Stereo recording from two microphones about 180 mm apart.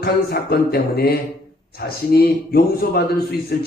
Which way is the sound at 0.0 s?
60° left (ahead or behind).